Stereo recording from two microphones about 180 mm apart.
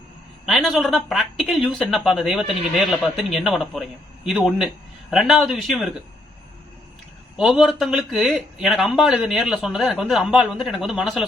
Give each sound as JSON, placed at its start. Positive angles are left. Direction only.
{"t": 0.4, "sound": "speech", "side_deg": 0}
{"t": 7.3, "sound": "speech", "side_deg": 0}